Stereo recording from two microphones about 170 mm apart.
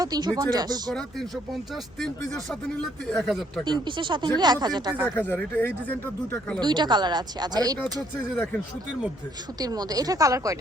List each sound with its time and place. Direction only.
0.0 s speech: 25° right (ahead or behind)
1.7 s speech: centre (ahead or behind)
3.6 s speech: 25° right (ahead or behind)
5.1 s speech: 10° left (ahead or behind)
6.6 s speech: 25° right (ahead or behind)
9.6 s speech: 25° right (ahead or behind)